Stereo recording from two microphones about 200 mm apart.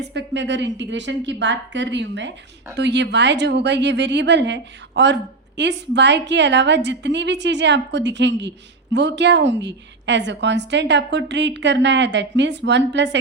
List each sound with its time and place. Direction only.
0.0 s speech: 60° right (ahead or behind)